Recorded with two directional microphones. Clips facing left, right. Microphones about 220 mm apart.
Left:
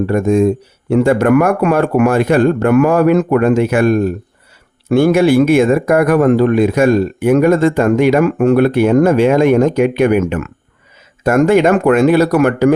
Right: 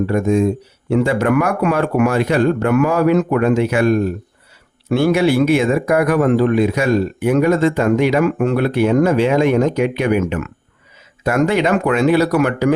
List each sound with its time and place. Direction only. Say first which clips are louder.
0.1 s speech: left 5 dB; 50° left (ahead or behind)